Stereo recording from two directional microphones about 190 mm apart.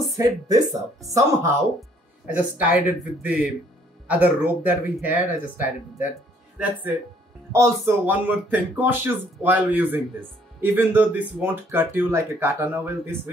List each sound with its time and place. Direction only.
0.2 s speech: 20° right (ahead or behind)